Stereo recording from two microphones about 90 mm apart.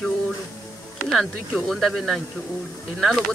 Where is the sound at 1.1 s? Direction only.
Centre (ahead or behind).